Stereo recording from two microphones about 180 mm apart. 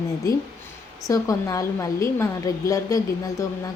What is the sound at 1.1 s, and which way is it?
A woman's voice, 20° left (ahead or behind).